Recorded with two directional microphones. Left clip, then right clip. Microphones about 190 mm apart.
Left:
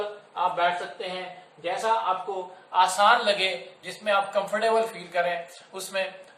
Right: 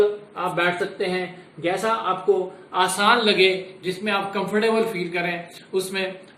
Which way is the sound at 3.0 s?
20° left (ahead or behind).